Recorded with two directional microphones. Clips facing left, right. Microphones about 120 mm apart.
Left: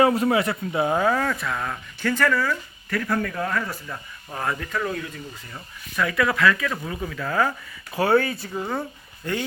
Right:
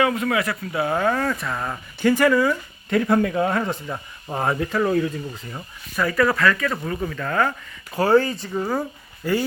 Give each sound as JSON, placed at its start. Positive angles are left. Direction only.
{"t": 0.0, "sound": "speech", "side_deg": 35}
{"t": 1.1, "sound": "speech", "side_deg": 0}
{"t": 6.0, "sound": "speech", "side_deg": 0}